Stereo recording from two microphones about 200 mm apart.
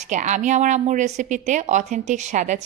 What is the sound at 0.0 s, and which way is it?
A woman's voice, 35° right (ahead or behind).